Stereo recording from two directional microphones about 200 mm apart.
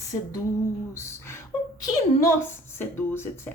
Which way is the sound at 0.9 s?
15° left (ahead or behind).